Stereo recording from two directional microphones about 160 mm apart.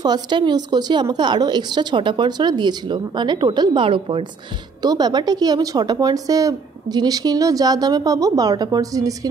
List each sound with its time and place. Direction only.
0.0 s a woman's voice: 25° right (ahead or behind)